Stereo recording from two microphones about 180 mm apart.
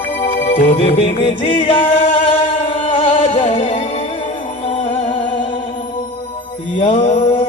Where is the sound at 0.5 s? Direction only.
30° left (ahead or behind).